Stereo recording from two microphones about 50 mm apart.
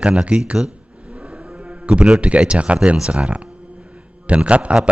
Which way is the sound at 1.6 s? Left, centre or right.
Right.